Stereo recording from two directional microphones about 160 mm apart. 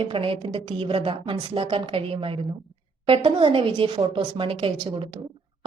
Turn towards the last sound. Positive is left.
turn(degrees=-35)  # may be behind; listen again after turning